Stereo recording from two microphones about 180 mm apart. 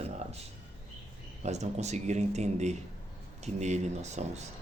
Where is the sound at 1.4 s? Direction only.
40° right (ahead or behind).